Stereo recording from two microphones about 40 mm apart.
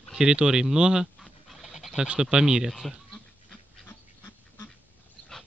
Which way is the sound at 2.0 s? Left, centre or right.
Centre.